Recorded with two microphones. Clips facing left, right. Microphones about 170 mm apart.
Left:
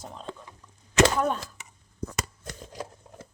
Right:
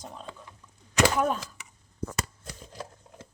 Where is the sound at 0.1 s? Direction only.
5° right (ahead or behind).